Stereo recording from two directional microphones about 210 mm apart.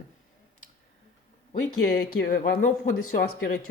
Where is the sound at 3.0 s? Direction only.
90° left.